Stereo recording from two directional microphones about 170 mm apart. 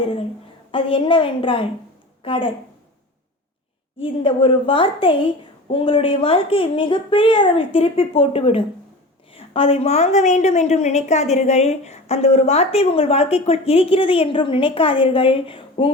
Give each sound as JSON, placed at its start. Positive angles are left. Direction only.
{"t": 0.0, "sound": "a woman's voice", "side_deg": 30}
{"t": 4.0, "sound": "a woman's voice", "side_deg": 30}